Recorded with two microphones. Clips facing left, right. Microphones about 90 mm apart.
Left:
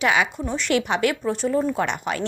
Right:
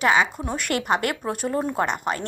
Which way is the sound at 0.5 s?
50° right (ahead or behind).